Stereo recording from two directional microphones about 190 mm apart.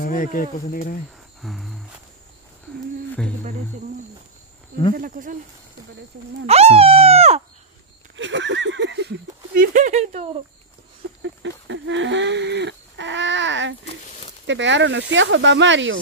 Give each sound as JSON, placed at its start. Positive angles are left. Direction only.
{"t": 0.0, "sound": "speech", "side_deg": 45}
{"t": 1.4, "sound": "cricket", "side_deg": 0}
{"t": 4.9, "sound": "speech", "side_deg": -45}
{"t": 6.4, "sound": "speech", "side_deg": -35}
{"t": 8.2, "sound": "a sound", "side_deg": -70}
{"t": 11.2, "sound": "a sound", "side_deg": -75}
{"t": 14.4, "sound": "speech", "side_deg": -75}